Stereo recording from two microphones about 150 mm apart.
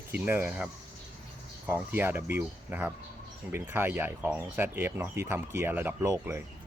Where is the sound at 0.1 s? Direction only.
15° right (ahead or behind).